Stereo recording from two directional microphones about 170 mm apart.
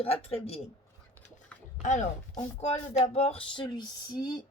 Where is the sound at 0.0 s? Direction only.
35° left (ahead or behind).